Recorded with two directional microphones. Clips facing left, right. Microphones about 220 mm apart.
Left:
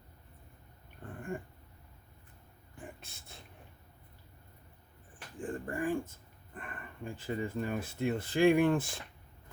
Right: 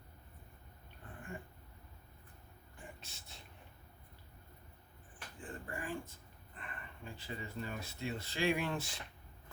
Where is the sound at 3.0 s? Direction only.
55° left (ahead or behind).